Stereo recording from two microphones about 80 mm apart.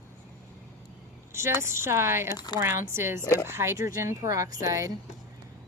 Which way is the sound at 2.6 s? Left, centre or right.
Right.